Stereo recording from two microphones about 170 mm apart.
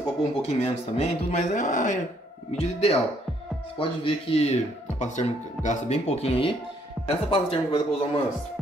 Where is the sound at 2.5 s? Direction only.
35° left (ahead or behind).